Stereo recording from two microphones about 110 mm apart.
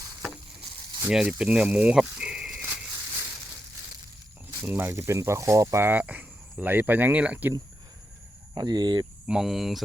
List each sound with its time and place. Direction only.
1.0 s speech: 5° right (ahead or behind)
4.6 s speech: 20° right (ahead or behind)
8.5 s speech: 40° right (ahead or behind)
9.2 s speech: 5° right (ahead or behind)